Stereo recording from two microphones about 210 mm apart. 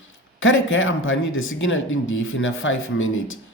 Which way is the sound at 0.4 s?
65° left (ahead or behind).